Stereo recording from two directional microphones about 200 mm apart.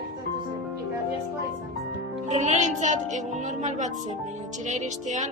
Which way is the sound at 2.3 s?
35° right (ahead or behind).